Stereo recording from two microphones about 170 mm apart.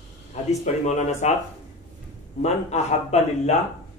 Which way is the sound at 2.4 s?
40° left (ahead or behind).